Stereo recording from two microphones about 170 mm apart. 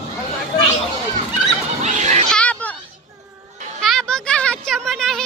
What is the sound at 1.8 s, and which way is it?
Chatter, 45° right (ahead or behind).